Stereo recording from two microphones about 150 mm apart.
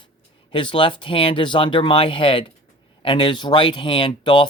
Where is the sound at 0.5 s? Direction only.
35° left (ahead or behind).